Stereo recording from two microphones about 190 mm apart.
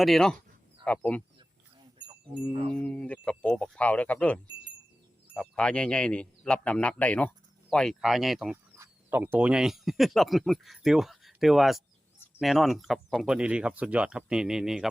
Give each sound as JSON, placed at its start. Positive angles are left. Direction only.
{"t": 0.0, "sound": "speech", "side_deg": 0}
{"t": 2.5, "sound": "a sound", "side_deg": -30}
{"t": 2.8, "sound": "speech", "side_deg": 5}